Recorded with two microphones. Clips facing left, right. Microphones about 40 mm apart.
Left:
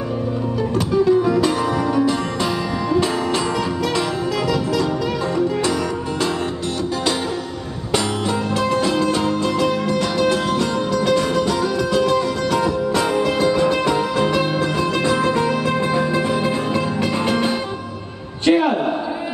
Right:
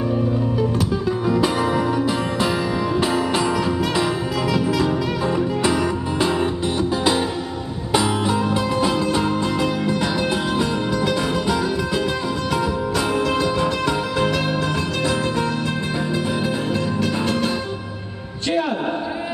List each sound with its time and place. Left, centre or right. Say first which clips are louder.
0.7 s music: left 6 dB; centre
4.5 s music: right 3 dB; centre
7.9 s music: right 1 dB; centre
13.8 s music: left 2 dB; centre
16.4 s music: left 2 dB; centre